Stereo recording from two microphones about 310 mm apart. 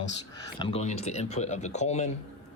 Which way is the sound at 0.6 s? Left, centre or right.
Centre.